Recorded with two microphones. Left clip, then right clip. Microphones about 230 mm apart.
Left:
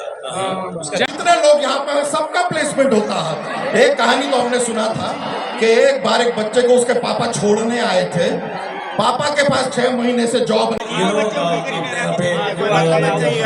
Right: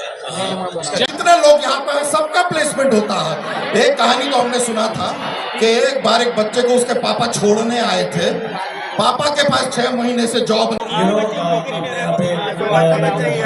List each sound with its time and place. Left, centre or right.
1.2 s a man's voice: right
10.9 s a man's voice: centre